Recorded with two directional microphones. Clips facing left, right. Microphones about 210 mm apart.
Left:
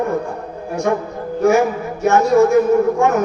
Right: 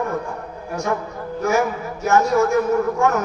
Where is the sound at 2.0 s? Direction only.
30° left (ahead or behind).